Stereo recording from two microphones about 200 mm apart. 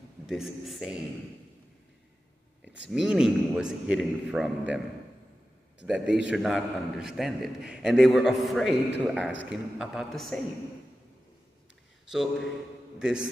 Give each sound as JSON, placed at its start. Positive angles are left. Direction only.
{"t": 0.3, "sound": "a man's voice", "side_deg": 0}
{"t": 2.9, "sound": "a man's voice", "side_deg": 0}
{"t": 12.1, "sound": "a man's voice", "side_deg": 0}